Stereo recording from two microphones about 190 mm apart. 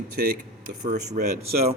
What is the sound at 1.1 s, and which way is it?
Speech, 40° right (ahead or behind).